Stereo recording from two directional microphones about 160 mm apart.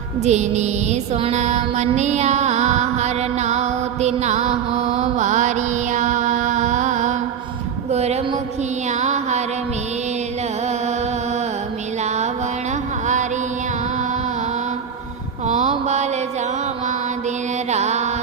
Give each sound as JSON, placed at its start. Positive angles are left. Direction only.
{"t": 0.3, "sound": "music", "side_deg": -45}
{"t": 15.4, "sound": "mantra", "side_deg": -45}
{"t": 17.7, "sound": "mantra", "side_deg": -45}